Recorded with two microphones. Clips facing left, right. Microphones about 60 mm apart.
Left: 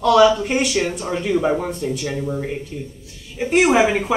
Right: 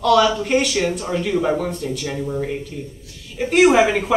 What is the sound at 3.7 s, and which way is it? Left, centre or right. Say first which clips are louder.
Speech: right 1 dB; centre.